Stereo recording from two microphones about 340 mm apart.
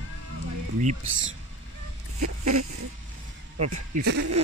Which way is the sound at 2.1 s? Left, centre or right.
Right.